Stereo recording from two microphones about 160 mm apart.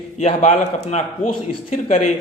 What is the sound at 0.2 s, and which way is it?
A man's voice, 45° left (ahead or behind).